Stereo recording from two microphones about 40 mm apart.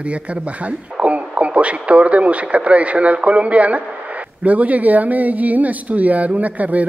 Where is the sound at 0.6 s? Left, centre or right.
Right.